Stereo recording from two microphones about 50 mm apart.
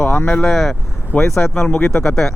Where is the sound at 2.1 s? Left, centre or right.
Centre.